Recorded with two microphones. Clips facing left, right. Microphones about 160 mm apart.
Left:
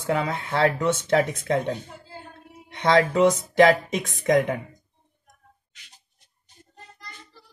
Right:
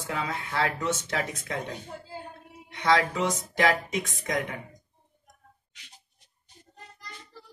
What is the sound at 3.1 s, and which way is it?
Speech, 60° left (ahead or behind).